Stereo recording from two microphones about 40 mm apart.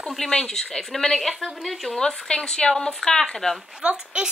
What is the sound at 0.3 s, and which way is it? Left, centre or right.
Speech, centre.